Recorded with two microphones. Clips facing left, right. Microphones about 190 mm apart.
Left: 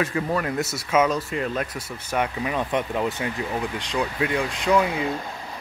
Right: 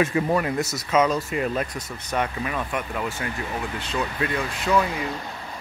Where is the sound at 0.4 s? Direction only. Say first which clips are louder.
Right 1 dB; 5° right (ahead or behind).